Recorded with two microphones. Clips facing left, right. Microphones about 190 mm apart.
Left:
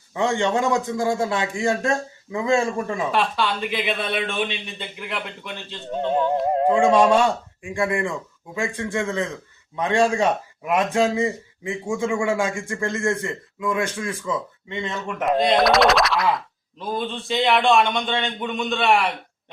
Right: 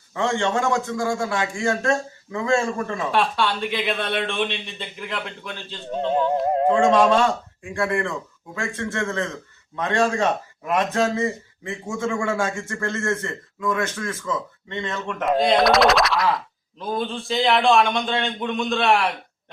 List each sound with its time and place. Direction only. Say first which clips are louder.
0.1 s a man's voice: left 1 dB; 15° left (ahead or behind)
3.1 s a man's voice: right 3 dB; centre (ahead or behind)
6.7 s a man's voice: left 1 dB; 10° left (ahead or behind)
15.2 s a man's voice: even; centre (ahead or behind)